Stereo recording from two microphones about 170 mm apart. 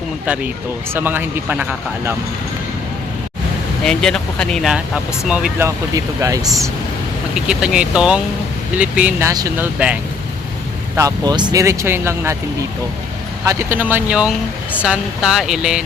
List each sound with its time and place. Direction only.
0.9 s speech: 10° right (ahead or behind)
3.8 s speech: 5° left (ahead or behind)
5.6 s speech: 20° right (ahead or behind)
7.3 s speech: 5° right (ahead or behind)
9.2 s speech: 20° right (ahead or behind)
9.7 s speech: 10° right (ahead or behind)
10.9 s speech: 20° right (ahead or behind)
13.4 s speech: 15° right (ahead or behind)